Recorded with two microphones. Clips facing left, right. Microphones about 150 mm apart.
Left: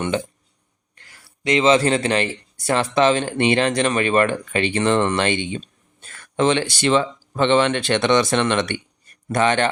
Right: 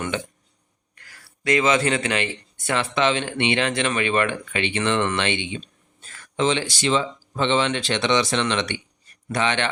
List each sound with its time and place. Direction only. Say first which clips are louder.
0.1 s speech: left 5 dB; 35° left (ahead or behind)
6.0 s speech: left 3 dB; 60° left (ahead or behind)